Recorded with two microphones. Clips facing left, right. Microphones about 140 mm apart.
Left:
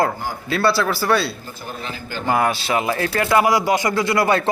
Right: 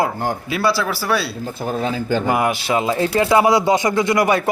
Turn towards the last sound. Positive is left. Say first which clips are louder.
# right 2 dB
turn(degrees=-15)  # may be behind; listen again after turning